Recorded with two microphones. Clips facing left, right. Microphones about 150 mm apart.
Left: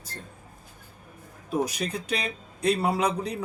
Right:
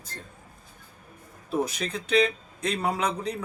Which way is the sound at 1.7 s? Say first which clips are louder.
Right 1 dB; 10° left (ahead or behind).